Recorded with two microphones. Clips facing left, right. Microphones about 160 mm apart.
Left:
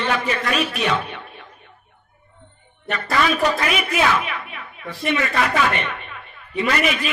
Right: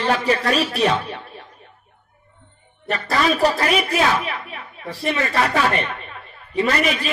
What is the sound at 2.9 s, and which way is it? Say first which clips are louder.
A man's voice: right 1 dB; 35° right (ahead or behind).